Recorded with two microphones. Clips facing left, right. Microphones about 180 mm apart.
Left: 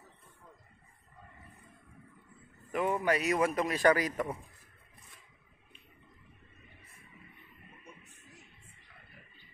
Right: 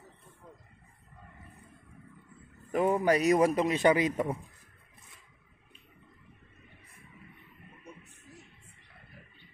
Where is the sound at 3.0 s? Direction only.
40° right (ahead or behind).